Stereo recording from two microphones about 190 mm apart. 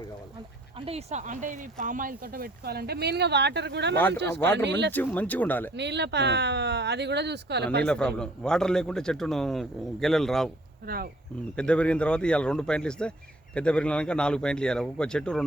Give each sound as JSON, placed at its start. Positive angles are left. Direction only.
{"t": 0.8, "sound": "speech", "side_deg": -30}
{"t": 3.9, "sound": "speech", "side_deg": 10}
{"t": 4.5, "sound": "speech", "side_deg": -65}
{"t": 4.9, "sound": "speech", "side_deg": 10}
{"t": 5.7, "sound": "speech", "side_deg": -65}
{"t": 7.9, "sound": "speech", "side_deg": 5}
{"t": 10.8, "sound": "speech", "side_deg": -55}
{"t": 11.5, "sound": "speech", "side_deg": 5}